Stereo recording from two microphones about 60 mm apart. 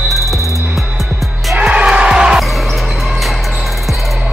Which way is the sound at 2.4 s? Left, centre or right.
Centre.